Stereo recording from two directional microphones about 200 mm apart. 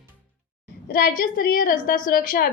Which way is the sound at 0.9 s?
45° left (ahead or behind).